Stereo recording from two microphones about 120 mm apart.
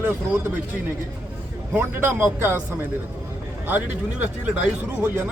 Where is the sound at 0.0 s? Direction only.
20° right (ahead or behind).